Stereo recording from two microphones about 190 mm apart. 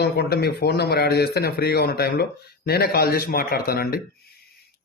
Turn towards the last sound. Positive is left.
turn(degrees=50)  # may be behind; listen again after turning